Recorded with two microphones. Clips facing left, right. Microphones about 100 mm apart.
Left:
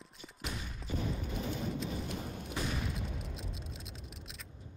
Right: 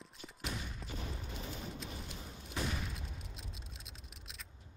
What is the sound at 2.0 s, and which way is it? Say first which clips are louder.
Fusillade: left 9 dB; 60° left (ahead or behind).